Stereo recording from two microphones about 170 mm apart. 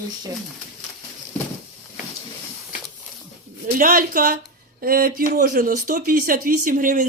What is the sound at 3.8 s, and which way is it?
A woman's voice, 55° right (ahead or behind).